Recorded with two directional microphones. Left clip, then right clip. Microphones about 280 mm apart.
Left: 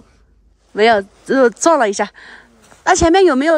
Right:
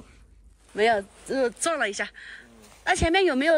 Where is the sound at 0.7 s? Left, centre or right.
Centre.